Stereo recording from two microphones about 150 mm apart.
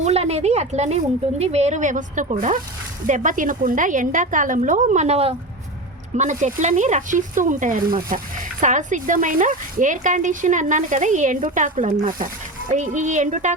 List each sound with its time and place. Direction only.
0.0 s a sound: 45° right (ahead or behind)
1.4 s speech: 50° right (ahead or behind); by 8.2 s 70° right (ahead or behind)
8.6 s speech: 55° right (ahead or behind)